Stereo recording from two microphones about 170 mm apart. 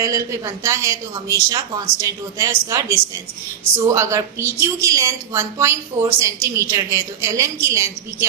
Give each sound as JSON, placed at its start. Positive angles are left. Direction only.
{"t": 0.0, "sound": "a woman's voice", "side_deg": -20}